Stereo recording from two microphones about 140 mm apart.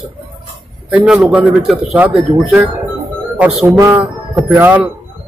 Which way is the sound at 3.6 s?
25° right (ahead or behind).